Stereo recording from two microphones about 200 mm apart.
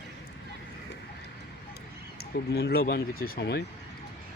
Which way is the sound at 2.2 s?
55° left (ahead or behind).